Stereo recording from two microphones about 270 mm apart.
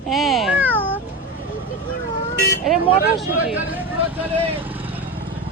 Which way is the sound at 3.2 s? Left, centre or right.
Centre.